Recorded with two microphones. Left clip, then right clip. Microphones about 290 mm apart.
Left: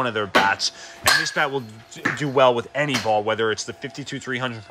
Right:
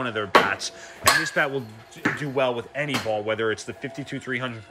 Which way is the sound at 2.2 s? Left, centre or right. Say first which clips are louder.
Left 10 dB; centre.